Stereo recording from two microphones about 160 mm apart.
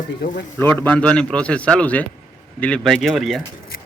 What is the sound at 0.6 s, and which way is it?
Speech, 10° left (ahead or behind).